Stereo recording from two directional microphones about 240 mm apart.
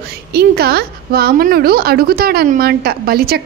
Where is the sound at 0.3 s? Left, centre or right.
Right.